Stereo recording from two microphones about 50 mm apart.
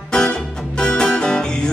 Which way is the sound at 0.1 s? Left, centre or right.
Centre.